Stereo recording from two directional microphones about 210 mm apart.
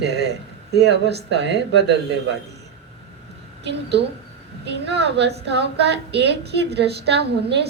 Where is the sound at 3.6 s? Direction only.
55° right (ahead or behind).